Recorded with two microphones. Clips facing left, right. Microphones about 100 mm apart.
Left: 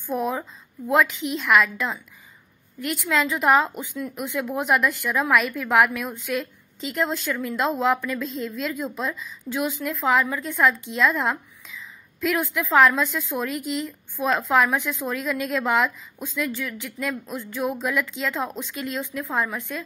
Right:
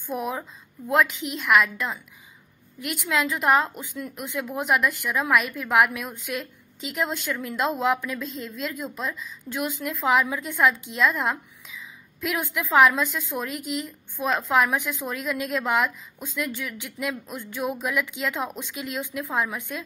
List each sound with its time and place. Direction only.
0.0 s a woman's voice: centre (ahead or behind)